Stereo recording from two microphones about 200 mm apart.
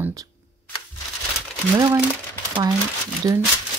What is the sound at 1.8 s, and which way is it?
Speech, 15° right (ahead or behind).